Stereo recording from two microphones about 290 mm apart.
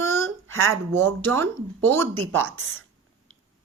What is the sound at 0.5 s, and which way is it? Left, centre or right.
Speech, right.